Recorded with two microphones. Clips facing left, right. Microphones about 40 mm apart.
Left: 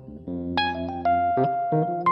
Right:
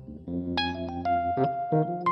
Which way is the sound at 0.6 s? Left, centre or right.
Centre.